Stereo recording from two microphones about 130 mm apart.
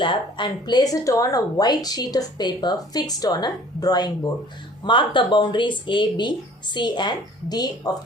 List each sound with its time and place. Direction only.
0.0 s speech: 40° left (ahead or behind)